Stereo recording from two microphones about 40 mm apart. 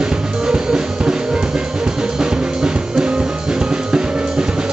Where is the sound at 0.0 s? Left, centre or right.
Centre.